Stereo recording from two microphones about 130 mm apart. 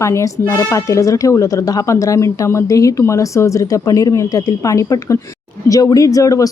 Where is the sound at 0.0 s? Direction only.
20° left (ahead or behind).